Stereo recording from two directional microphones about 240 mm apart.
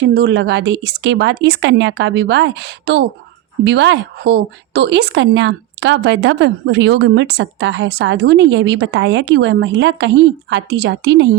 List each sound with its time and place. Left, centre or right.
0.0 s speech: right